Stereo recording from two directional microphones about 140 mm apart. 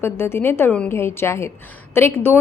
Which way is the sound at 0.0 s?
15° left (ahead or behind).